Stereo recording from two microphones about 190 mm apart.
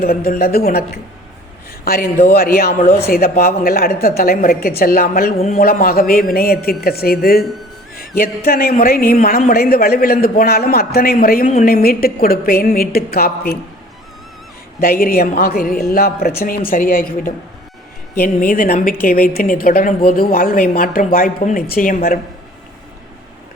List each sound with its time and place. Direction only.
0.0 s a woman's voice: 50° left (ahead or behind)
7.9 s a sound: 50° left (ahead or behind)
8.4 s a woman's voice: 50° left (ahead or behind)
14.8 s a woman's voice: 50° left (ahead or behind)